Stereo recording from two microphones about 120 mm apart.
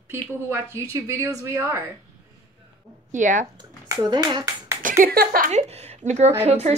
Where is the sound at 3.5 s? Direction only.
35° right (ahead or behind).